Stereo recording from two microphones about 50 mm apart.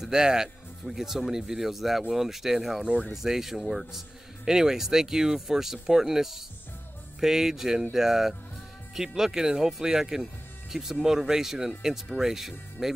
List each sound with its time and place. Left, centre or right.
0.0 s speech: centre
2.8 s speech: centre
3.2 s speech: centre